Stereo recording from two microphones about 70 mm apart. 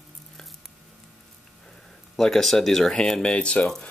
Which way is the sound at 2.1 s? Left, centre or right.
Centre.